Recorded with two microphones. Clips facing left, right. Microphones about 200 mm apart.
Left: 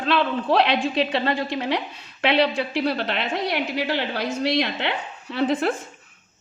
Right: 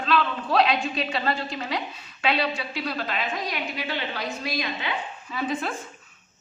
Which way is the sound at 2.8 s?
70° left (ahead or behind).